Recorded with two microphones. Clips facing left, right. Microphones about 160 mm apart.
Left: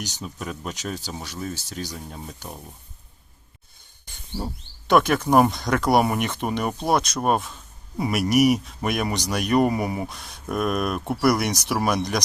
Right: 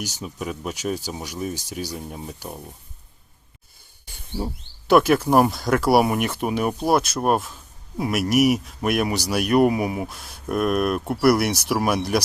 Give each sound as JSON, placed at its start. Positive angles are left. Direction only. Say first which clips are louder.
{"t": 0.0, "sound": "speech", "louder": "right 3 dB", "side_deg": -10}
{"t": 4.0, "sound": "speech", "louder": "right 2 dB", "side_deg": -10}